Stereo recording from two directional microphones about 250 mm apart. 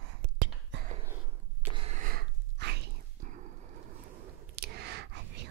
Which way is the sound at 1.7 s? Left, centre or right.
Right.